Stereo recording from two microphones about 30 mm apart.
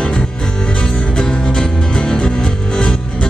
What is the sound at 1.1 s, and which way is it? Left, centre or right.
Music, left.